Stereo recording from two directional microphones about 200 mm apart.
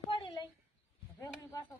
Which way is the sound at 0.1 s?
25° left (ahead or behind).